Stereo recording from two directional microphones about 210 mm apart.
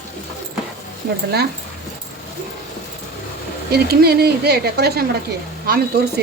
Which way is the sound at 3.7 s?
50° right (ahead or behind).